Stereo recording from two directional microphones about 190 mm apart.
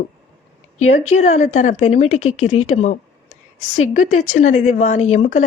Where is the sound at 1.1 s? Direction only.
35° left (ahead or behind).